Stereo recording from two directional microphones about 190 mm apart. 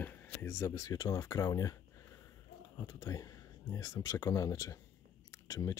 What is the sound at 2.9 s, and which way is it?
Speech, 20° left (ahead or behind).